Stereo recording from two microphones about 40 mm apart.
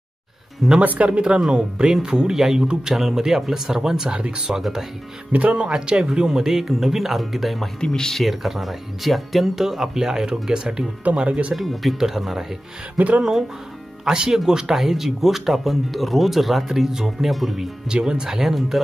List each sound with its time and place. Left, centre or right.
0.8 s speech: right
1.9 s speech: centre
4.6 s speech: centre
5.5 s speech: right; by 7.7 s centre
7.8 s speech: centre
8.2 s speech: centre
11.1 s speech: right
11.5 s speech: centre
12.9 s speech: right
14.0 s speech: centre
17.8 s speech: right